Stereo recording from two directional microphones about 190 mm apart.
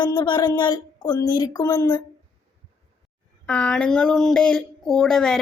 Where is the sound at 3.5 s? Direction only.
5° left (ahead or behind).